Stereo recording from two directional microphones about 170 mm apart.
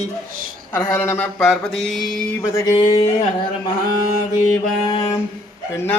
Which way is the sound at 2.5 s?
15° left (ahead or behind).